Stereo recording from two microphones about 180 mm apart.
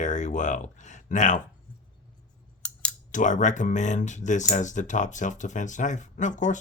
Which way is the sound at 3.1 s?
45° left (ahead or behind).